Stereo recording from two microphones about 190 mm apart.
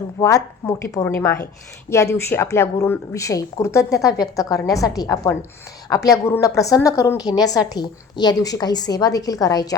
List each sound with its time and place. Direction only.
0.2 s a woman's voice: 15° left (ahead or behind)